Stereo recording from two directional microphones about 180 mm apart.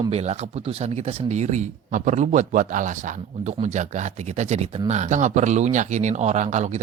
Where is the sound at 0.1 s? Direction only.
35° right (ahead or behind).